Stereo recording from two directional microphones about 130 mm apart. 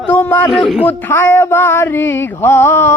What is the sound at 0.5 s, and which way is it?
Speech, 5° right (ahead or behind).